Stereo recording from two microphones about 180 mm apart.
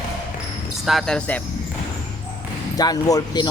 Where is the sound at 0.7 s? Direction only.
Centre (ahead or behind).